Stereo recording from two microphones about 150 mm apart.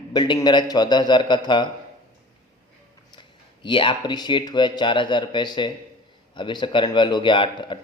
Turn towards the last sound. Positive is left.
turn(degrees=35)  # may be behind; listen again after turning